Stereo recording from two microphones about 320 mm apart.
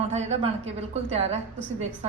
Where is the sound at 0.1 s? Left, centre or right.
Centre.